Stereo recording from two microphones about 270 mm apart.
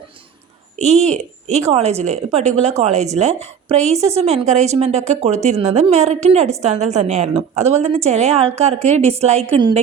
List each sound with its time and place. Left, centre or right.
0.8 s a woman's voice: right